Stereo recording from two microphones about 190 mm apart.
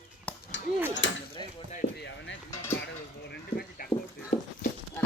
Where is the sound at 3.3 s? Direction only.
50° left (ahead or behind).